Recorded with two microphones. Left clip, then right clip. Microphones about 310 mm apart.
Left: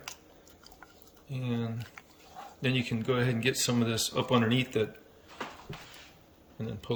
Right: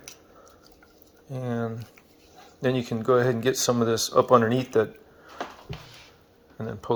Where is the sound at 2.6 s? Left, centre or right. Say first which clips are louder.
Right 5 dB; right.